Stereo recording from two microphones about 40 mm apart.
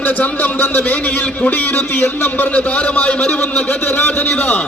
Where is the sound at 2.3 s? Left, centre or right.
Left.